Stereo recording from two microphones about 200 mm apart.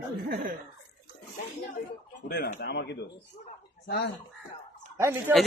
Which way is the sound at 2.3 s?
55° left (ahead or behind).